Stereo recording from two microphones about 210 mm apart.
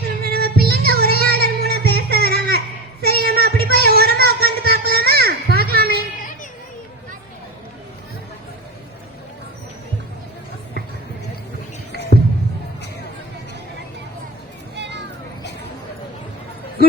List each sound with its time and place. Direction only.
0.2 s music: 50° right (ahead or behind)
0.6 s child singing: 50° right (ahead or behind)
1.3 s music: 50° right (ahead or behind)
3.0 s child singing: 50° right (ahead or behind)
14.8 s children playing: 55° right (ahead or behind)